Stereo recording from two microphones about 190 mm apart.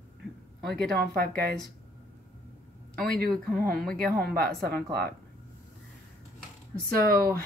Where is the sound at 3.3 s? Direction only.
5° left (ahead or behind).